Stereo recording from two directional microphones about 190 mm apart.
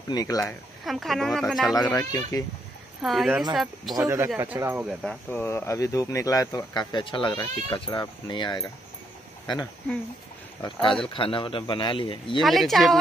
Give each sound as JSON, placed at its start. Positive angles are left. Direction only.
{"t": 0.1, "sound": "speech", "side_deg": 20}
{"t": 0.5, "sound": "a woman's voice", "side_deg": 0}
{"t": 1.8, "sound": "speech", "side_deg": 20}
{"t": 3.0, "sound": "a woman's voice", "side_deg": 0}
{"t": 3.9, "sound": "speech", "side_deg": -15}
{"t": 5.0, "sound": "speech", "side_deg": 10}
{"t": 10.6, "sound": "speech", "side_deg": 25}
{"t": 12.4, "sound": "a woman's voice", "side_deg": 0}